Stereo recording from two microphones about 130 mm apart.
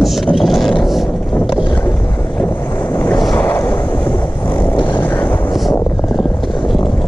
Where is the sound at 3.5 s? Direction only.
15° left (ahead or behind).